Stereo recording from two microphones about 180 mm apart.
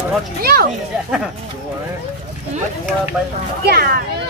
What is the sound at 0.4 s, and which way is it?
Speech, 55° right (ahead or behind).